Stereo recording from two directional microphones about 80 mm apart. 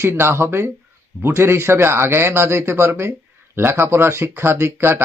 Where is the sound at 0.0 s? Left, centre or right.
Right.